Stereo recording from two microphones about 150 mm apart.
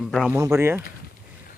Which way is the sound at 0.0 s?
Centre (ahead or behind).